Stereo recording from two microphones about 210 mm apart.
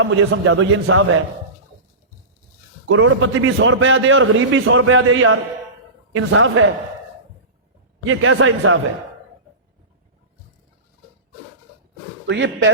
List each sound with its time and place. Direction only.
0.0 s a man's voice: 70° right (ahead or behind)
2.9 s a man's voice: 65° right (ahead or behind)
8.0 s a man's voice: 70° right (ahead or behind)
12.3 s a man's voice: 60° right (ahead or behind)